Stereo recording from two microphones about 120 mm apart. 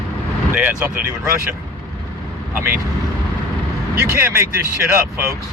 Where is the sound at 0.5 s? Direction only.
10° right (ahead or behind).